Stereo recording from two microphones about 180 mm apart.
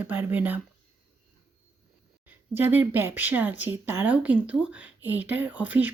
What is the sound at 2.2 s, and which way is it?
Speech, 10° right (ahead or behind).